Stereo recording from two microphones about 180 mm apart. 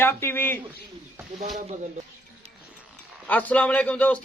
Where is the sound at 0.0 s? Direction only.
15° left (ahead or behind).